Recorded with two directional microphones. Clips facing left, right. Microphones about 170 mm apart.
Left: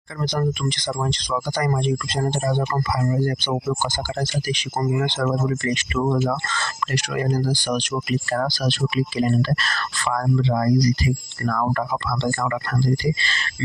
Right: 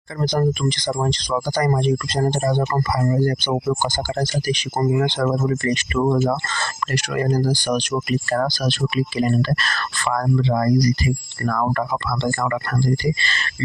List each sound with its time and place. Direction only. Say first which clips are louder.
0.2 s speech: right 4 dB; 35° right (ahead or behind); by 13.5 s 55° right (ahead or behind)